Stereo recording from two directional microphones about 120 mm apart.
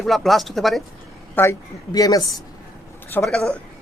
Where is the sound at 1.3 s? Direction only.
20° left (ahead or behind).